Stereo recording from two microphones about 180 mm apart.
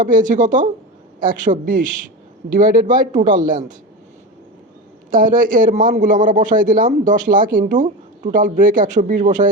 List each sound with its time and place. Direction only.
0.0 s a man's voice: 45° right (ahead or behind)
5.1 s a man's voice: 50° right (ahead or behind)